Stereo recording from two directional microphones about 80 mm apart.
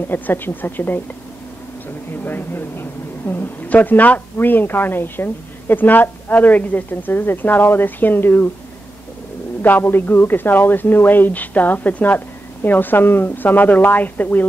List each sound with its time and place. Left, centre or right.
0.1 s speech: left
2.2 s speech: left
9.6 s speech: left